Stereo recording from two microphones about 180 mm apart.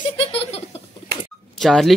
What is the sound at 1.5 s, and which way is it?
Speech, centre (ahead or behind).